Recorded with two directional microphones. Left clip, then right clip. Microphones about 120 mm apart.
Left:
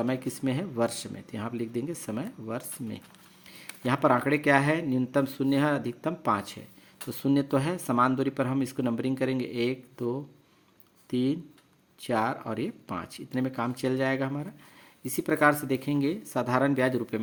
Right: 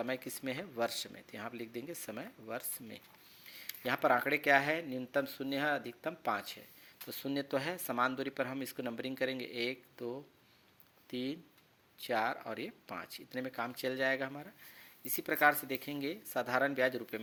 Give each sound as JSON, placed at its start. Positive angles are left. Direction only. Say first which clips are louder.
{"t": 0.0, "sound": "speech", "louder": "left 8 dB", "side_deg": -30}